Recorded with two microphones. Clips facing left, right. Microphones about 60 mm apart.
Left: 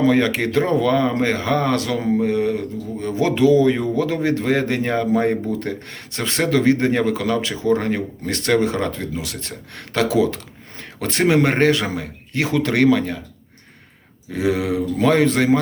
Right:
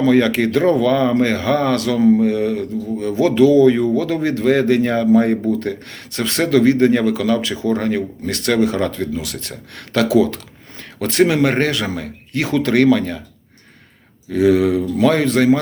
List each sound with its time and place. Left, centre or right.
0.0 s speech: left
14.3 s speech: left